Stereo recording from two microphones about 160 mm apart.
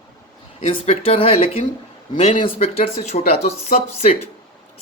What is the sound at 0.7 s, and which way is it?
Speech, 40° left (ahead or behind).